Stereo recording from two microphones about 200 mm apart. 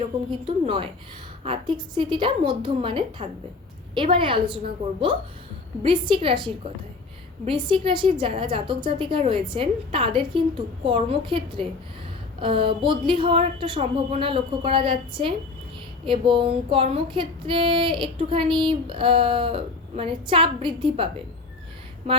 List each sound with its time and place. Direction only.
0.3 s female singing: 25° right (ahead or behind)
22.0 s speech: 30° right (ahead or behind)